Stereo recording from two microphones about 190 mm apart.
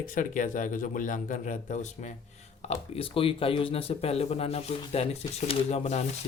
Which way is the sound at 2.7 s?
30° left (ahead or behind).